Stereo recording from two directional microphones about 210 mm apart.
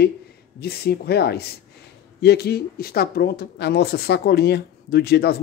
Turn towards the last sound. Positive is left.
turn(degrees=50)  # may be behind; listen again after turning